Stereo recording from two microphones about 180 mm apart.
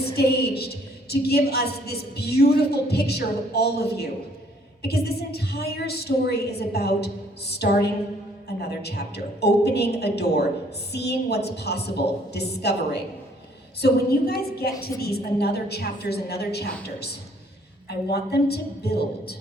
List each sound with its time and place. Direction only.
0.2 s a woman's voice: 60° left (ahead or behind)